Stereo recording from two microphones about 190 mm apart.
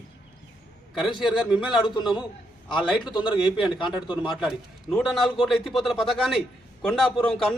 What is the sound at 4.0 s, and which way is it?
Speech, 25° left (ahead or behind).